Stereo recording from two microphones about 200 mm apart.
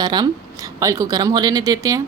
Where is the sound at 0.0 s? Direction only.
20° right (ahead or behind).